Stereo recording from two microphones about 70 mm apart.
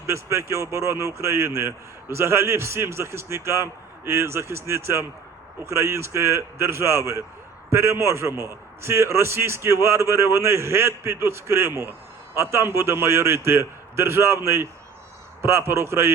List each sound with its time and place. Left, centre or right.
0.1 s a man's voice: right